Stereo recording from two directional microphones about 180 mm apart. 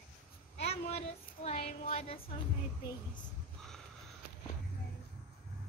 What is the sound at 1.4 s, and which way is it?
Speech, 35° left (ahead or behind).